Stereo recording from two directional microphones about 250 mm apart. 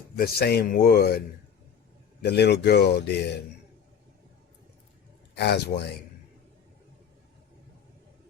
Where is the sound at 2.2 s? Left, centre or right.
Left.